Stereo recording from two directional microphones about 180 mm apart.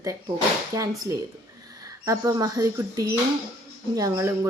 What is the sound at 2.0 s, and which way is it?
Speech, 20° right (ahead or behind).